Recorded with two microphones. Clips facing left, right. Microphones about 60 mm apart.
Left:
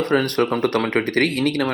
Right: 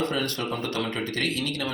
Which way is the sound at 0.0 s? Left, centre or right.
Left.